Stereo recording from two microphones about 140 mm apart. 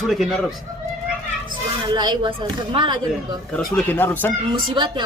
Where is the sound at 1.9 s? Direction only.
30° right (ahead or behind).